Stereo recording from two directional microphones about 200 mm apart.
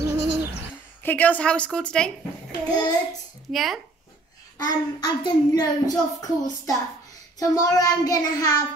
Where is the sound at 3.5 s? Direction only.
Centre (ahead or behind).